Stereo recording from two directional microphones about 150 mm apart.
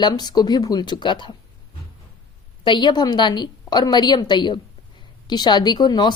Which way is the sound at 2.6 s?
30° left (ahead or behind).